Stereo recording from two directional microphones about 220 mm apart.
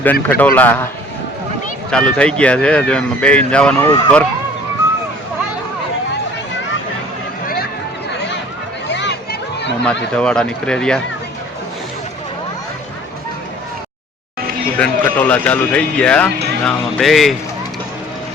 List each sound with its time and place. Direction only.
0.0 s a man's voice: 10° left (ahead or behind)
1.9 s speech: 5° left (ahead or behind)
7.4 s a sound: 45° left (ahead or behind)
8.1 s run: 50° left (ahead or behind)
8.9 s a sound: 55° left (ahead or behind)
9.8 s speech: 5° left (ahead or behind)
14.8 s speech: 5° left (ahead or behind)